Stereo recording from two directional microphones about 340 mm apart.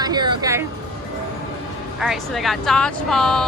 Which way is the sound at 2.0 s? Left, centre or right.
Centre.